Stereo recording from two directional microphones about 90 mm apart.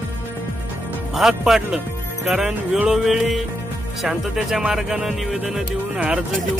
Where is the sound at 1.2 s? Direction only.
5° right (ahead or behind).